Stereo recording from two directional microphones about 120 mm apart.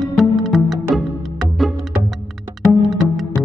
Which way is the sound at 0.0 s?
Centre (ahead or behind).